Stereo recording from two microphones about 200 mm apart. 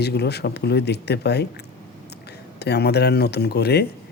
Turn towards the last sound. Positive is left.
turn(degrees=55)  # may be behind; listen again after turning